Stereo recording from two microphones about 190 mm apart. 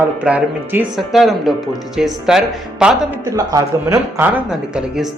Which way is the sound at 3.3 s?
15° right (ahead or behind).